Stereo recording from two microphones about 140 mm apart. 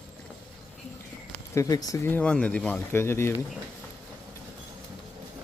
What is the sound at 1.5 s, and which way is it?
Speech, 25° left (ahead or behind).